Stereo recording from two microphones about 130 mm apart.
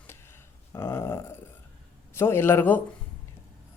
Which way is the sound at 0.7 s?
20° left (ahead or behind).